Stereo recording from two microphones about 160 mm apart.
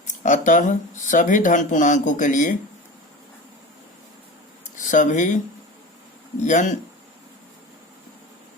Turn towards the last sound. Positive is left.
turn(degrees=50)  # may be behind; listen again after turning